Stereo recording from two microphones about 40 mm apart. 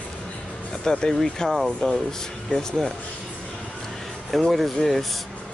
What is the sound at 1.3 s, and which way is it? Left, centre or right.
Speech, centre.